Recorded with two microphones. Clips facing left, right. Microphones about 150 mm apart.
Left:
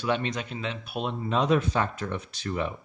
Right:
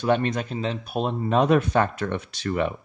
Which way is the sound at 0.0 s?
50° right (ahead or behind).